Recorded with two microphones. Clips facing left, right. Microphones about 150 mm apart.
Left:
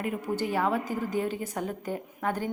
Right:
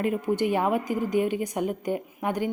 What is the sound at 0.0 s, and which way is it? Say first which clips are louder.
A woman's voice: right 5 dB; 20° right (ahead or behind).